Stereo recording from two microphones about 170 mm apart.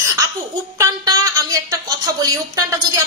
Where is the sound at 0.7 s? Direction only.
20° right (ahead or behind).